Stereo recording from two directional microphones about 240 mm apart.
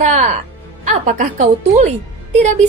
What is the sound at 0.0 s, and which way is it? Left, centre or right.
A woman's voice, right.